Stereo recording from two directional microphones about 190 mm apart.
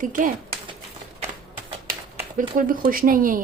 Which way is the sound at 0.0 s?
45° right (ahead or behind).